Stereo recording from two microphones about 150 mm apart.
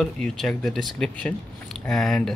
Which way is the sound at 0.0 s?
Centre (ahead or behind).